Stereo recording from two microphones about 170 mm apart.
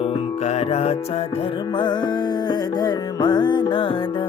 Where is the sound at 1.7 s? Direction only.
25° left (ahead or behind).